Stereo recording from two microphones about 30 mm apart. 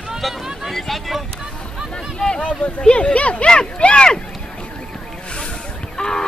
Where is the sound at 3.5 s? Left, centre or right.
Left.